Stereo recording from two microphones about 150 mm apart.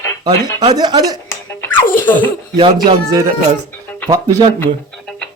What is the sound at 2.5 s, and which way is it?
Speech, 35° right (ahead or behind).